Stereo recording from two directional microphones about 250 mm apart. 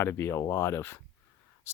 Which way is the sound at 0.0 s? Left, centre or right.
Centre.